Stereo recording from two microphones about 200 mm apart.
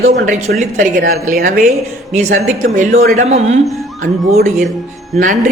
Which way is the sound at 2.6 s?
40° right (ahead or behind).